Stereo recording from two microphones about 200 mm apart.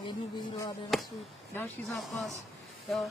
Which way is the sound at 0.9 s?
Centre (ahead or behind).